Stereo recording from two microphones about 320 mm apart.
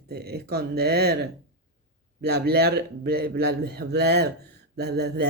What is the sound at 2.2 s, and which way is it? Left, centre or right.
Speech, right.